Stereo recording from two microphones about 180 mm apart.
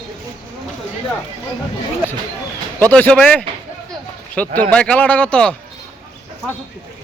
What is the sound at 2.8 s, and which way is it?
Speech, 10° left (ahead or behind).